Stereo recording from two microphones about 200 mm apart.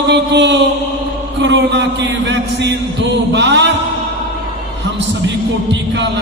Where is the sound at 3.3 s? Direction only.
60° right (ahead or behind).